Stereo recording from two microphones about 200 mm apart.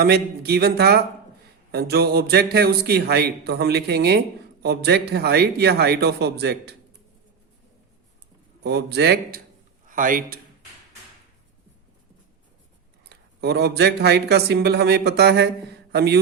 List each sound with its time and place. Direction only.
0.0 s a man's voice: 55° right (ahead or behind)
8.6 s speech: 55° right (ahead or behind)
9.9 s a man's voice: 40° right (ahead or behind)
13.1 s speech: 55° right (ahead or behind)